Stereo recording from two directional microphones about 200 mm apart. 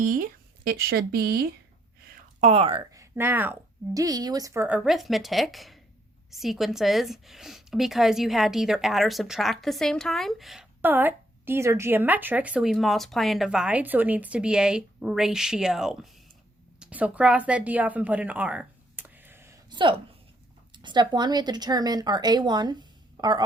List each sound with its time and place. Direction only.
0.0 s speech: 45° right (ahead or behind)
2.4 s speech: 30° right (ahead or behind)
2.9 s speech: 15° right (ahead or behind)
4.8 s a woman's voice: centre (ahead or behind); by 23.4 s 20° right (ahead or behind)